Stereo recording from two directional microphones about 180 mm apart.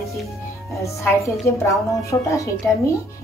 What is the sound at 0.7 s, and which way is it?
Speech, 15° left (ahead or behind).